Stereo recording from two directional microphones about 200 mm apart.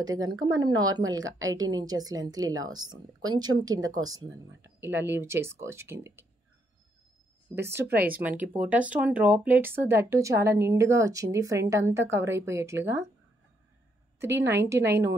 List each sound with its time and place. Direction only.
0.2 s a woman's voice: 20° right (ahead or behind)
7.6 s speech: 10° right (ahead or behind)
14.7 s speech: 15° right (ahead or behind)